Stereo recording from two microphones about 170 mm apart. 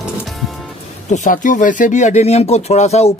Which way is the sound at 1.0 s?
45° left (ahead or behind).